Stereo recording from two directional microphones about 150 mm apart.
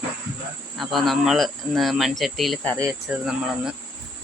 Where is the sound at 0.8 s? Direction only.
Centre (ahead or behind).